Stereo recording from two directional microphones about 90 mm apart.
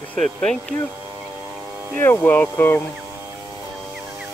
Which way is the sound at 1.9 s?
25° left (ahead or behind).